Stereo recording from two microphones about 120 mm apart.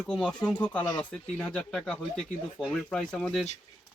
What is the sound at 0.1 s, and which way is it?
Speech, 5° left (ahead or behind).